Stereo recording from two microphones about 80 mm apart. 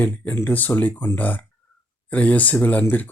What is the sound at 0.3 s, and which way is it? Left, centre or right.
Speech, left.